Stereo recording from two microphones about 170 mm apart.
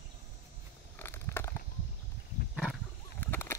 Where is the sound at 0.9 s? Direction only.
15° left (ahead or behind).